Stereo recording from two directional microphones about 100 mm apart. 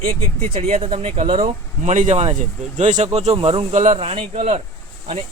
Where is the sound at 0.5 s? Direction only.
80° right.